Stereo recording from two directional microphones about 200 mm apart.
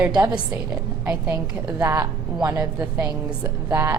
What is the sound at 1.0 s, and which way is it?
A woman's voice, 5° right (ahead or behind).